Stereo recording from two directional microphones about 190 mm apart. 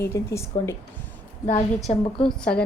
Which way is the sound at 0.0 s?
15° left (ahead or behind).